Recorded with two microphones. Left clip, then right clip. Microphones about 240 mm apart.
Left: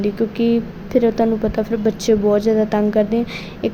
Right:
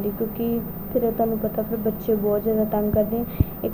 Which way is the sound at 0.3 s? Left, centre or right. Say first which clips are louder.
Left 8 dB; left.